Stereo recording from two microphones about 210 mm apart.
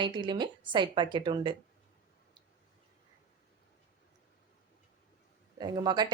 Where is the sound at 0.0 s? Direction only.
20° right (ahead or behind).